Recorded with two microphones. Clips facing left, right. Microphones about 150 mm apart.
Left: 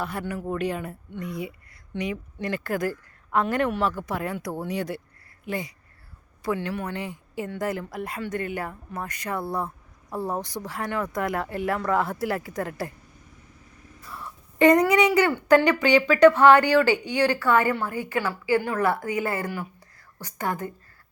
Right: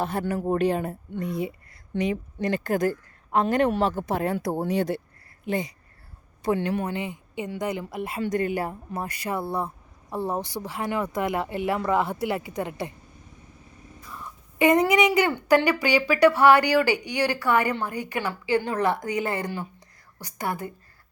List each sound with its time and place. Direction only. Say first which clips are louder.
0.0 s a woman's voice: right 4 dB; 25° right (ahead or behind)
7.0 s a woman's voice: even; centre (ahead or behind)
8.3 s speech: right 7 dB; 35° right (ahead or behind)
9.4 s speech: right 1 dB; centre (ahead or behind)
14.8 s speech: left 1 dB; 15° right (ahead or behind)